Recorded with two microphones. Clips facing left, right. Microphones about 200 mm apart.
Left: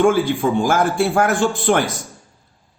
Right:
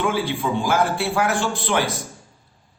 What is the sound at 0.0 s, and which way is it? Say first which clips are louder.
A man's voice: left 7 dB; 50° left (ahead or behind).